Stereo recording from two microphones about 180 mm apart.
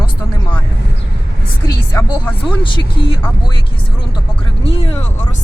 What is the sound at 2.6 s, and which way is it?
Speech, 25° left (ahead or behind).